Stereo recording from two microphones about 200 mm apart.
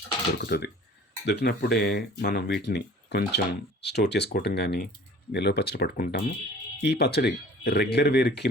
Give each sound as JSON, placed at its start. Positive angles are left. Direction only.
{"t": 0.4, "sound": "speech", "side_deg": 55}